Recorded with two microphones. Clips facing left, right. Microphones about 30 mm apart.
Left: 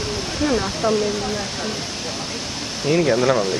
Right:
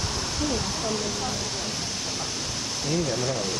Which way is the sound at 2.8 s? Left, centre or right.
Left.